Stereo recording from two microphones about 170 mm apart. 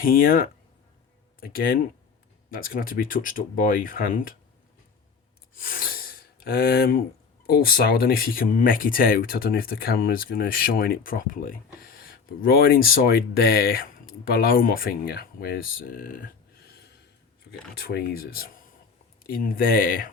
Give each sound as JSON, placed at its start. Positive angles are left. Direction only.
{"t": 0.0, "sound": "speech", "side_deg": 55}
{"t": 5.5, "sound": "gasp", "side_deg": 55}
{"t": 7.4, "sound": "speech", "side_deg": 60}